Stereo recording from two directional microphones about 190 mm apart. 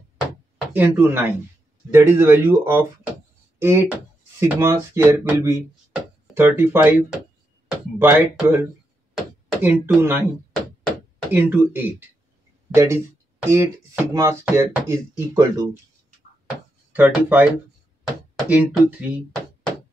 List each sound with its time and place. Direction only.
0.7 s speech: 10° right (ahead or behind)
11.3 s speech: 10° right (ahead or behind)
16.9 s speech: 10° right (ahead or behind)